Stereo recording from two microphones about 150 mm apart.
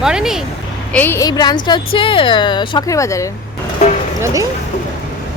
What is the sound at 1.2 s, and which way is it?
A woman's voice, 30° left (ahead or behind).